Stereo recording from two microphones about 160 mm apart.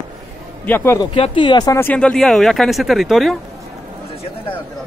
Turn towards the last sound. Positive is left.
turn(degrees=0)  # may be behind; listen again after turning